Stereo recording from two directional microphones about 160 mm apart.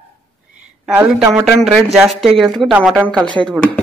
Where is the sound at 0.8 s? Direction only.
5° right (ahead or behind).